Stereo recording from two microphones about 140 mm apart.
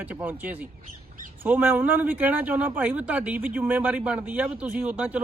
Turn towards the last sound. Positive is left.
turn(degrees=-10)  # may be behind; listen again after turning